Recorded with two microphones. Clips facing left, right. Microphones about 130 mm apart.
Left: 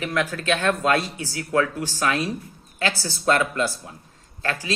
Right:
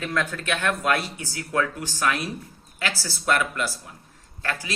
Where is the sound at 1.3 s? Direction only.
20° left (ahead or behind).